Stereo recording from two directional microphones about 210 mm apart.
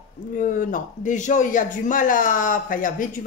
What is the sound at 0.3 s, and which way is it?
Speech, 40° left (ahead or behind).